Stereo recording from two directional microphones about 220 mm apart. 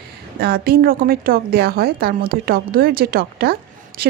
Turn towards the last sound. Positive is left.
turn(degrees=-45)  # may be behind; listen again after turning